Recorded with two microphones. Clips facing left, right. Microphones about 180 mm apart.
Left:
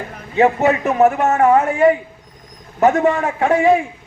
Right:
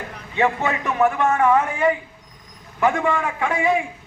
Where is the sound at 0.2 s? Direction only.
40° left (ahead or behind).